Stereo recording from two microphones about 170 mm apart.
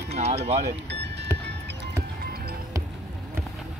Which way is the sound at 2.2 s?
65° right (ahead or behind).